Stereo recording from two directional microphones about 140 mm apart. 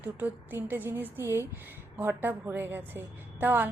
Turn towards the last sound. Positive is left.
turn(degrees=-15)  # may be behind; listen again after turning